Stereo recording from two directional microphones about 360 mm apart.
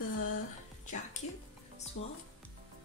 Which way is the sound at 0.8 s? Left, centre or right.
Left.